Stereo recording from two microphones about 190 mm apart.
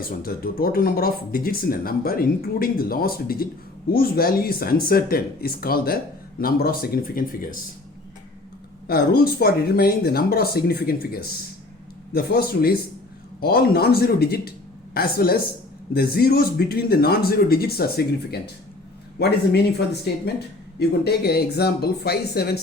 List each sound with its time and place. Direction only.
0.2 s speech: 50° left (ahead or behind)
8.9 s speech: 55° left (ahead or behind)
12.1 s speech: 55° left (ahead or behind)
20.7 s speech: 60° left (ahead or behind)